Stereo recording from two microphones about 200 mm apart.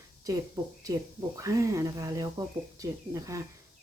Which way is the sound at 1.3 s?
15° right (ahead or behind).